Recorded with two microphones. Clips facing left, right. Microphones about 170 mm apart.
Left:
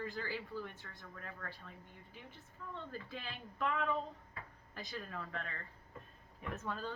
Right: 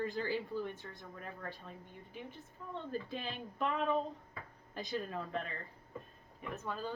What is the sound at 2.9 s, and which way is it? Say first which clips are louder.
A woman's voice: right 6 dB; 20° right (ahead or behind).